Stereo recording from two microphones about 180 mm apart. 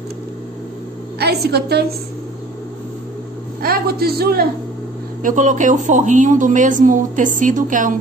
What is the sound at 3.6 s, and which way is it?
Speech, 60° right (ahead or behind).